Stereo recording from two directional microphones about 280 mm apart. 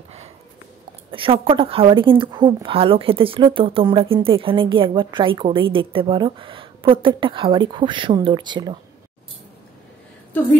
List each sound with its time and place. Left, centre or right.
1.1 s a woman's voice: centre